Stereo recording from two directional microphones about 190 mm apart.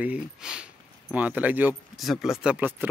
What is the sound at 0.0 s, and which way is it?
Speech, 5° right (ahead or behind).